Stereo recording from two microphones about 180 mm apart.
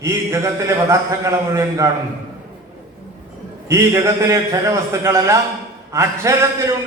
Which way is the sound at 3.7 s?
15° right (ahead or behind).